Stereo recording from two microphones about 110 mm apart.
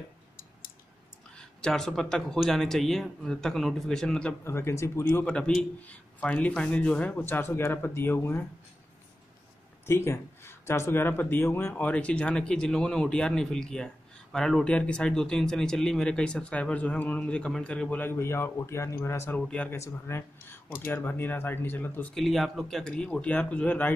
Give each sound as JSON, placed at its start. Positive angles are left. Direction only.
{"t": 1.3, "sound": "speech", "side_deg": 5}
{"t": 4.5, "sound": "speech", "side_deg": 25}
{"t": 5.2, "sound": "speech", "side_deg": 10}
{"t": 9.8, "sound": "speech", "side_deg": 20}
{"t": 19.4, "sound": "speech", "side_deg": 10}
{"t": 19.7, "sound": "speech", "side_deg": 20}
{"t": 22.1, "sound": "speech", "side_deg": 0}